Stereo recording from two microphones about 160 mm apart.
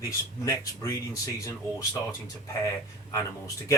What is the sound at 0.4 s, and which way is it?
Speech, 20° left (ahead or behind).